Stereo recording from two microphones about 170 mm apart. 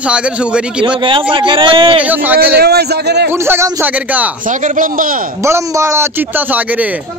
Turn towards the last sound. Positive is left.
turn(degrees=-10)  # may be behind; listen again after turning